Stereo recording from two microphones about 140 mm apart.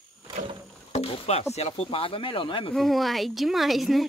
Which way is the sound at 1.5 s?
45° left (ahead or behind).